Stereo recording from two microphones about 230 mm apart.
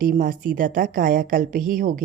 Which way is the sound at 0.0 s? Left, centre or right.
Right.